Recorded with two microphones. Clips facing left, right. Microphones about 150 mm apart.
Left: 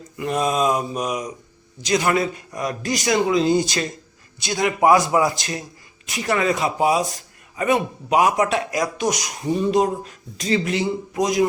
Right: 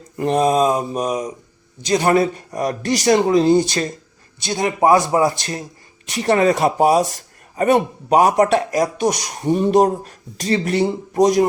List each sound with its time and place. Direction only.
0.2 s speech: 35° right (ahead or behind)
9.6 s speech: 45° right (ahead or behind)